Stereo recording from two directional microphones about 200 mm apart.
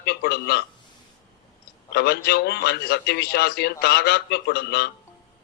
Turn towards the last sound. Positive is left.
turn(degrees=55)  # may be behind; listen again after turning